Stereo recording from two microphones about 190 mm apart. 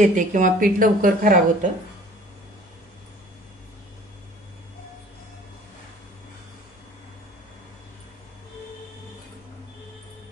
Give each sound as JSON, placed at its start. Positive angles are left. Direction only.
{"t": 0.0, "sound": "a woman's voice", "side_deg": -40}